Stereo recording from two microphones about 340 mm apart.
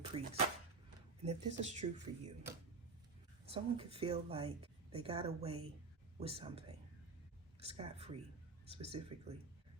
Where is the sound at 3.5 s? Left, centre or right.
Centre.